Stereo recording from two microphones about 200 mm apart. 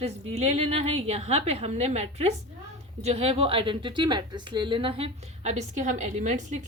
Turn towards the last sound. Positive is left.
turn(degrees=-35)  # may be behind; listen again after turning